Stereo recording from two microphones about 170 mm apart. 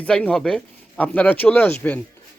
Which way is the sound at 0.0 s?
5° left (ahead or behind).